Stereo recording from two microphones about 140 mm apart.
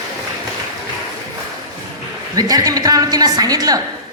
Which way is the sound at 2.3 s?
25° right (ahead or behind).